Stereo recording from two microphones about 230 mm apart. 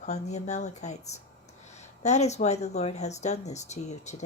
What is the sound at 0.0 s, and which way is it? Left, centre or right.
Speech, left.